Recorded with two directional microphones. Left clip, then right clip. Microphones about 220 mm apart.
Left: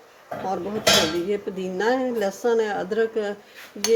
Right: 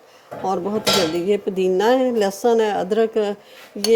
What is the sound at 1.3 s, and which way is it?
A woman's voice, 30° right (ahead or behind).